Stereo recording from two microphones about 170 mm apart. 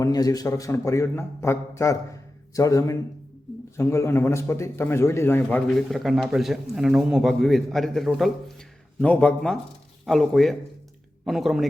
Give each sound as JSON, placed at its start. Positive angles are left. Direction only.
{"t": 0.0, "sound": "a man's voice", "side_deg": 20}